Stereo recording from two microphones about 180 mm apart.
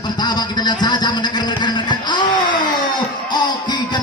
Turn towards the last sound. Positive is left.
turn(degrees=25)  # may be behind; listen again after turning